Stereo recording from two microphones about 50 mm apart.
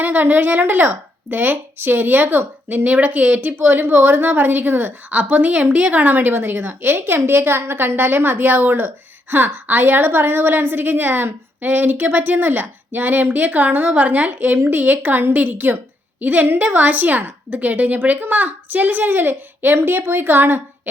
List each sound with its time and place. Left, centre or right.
0.0 s a woman's voice: right